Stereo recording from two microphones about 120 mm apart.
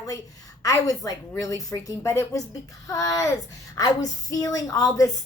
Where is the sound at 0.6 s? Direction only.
30° left (ahead or behind).